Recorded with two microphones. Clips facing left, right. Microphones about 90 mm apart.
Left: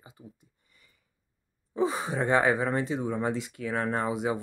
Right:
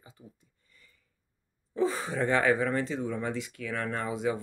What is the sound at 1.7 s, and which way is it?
Speech, 15° left (ahead or behind).